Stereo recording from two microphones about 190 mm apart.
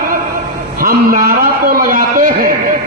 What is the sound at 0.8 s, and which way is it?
A man's voice, 50° right (ahead or behind).